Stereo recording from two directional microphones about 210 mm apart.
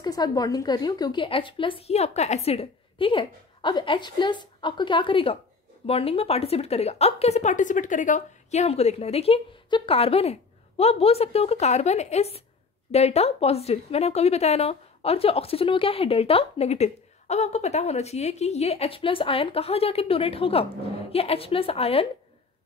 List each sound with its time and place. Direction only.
0.0 s speech: 20° left (ahead or behind)